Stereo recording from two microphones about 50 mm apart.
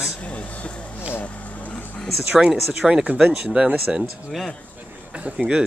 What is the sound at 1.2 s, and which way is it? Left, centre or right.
Boat, left.